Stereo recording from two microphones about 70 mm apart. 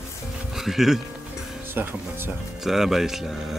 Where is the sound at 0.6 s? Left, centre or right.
Centre.